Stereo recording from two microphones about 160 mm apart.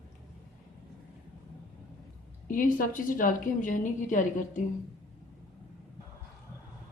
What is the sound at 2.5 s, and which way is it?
A woman's voice, 55° left (ahead or behind).